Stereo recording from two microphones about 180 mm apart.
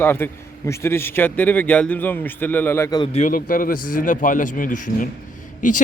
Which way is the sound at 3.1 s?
45° left (ahead or behind).